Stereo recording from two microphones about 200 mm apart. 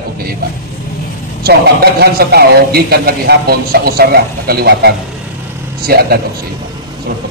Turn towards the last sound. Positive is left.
turn(degrees=-50)  # may be behind; listen again after turning